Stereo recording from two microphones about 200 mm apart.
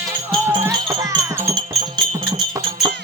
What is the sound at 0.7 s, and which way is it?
Music, 20° right (ahead or behind).